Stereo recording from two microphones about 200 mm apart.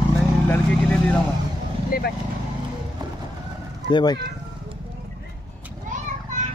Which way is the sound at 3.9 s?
20° left (ahead or behind).